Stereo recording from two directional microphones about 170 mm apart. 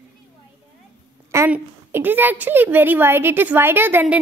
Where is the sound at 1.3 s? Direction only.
15° right (ahead or behind).